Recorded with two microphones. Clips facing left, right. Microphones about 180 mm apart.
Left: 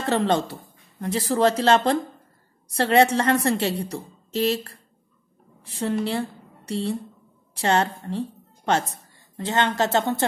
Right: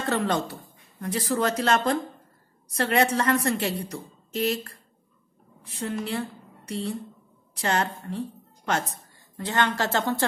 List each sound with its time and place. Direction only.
0.0 s a woman's voice: 25° left (ahead or behind)
5.8 s a woman's voice: 30° left (ahead or behind)
9.4 s a woman's voice: 25° left (ahead or behind)